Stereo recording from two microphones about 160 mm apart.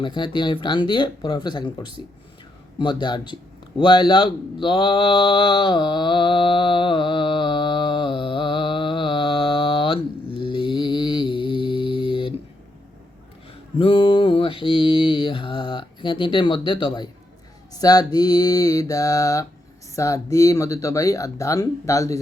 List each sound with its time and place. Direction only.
0.0 s speech: 30° left (ahead or behind)
3.8 s a sound: 30° left (ahead or behind)
13.7 s mantra: 35° left (ahead or behind)
17.7 s speech: 25° left (ahead or behind)